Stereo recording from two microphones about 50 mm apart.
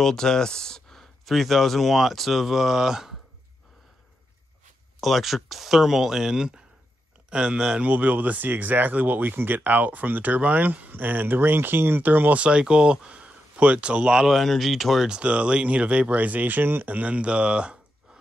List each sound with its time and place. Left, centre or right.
0.0 s speech: centre
5.0 s speech: centre
7.8 s speech: right
12.4 s speech: right
14.3 s speech: centre
15.0 s speech: right
16.9 s speech: right